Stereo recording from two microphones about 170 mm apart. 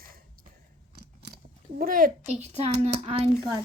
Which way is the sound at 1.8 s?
55° right (ahead or behind).